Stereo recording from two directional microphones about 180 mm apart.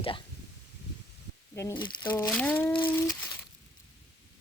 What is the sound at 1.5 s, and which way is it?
Speech, 15° left (ahead or behind).